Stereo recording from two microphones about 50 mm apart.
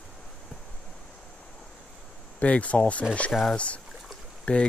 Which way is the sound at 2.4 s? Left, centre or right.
Left.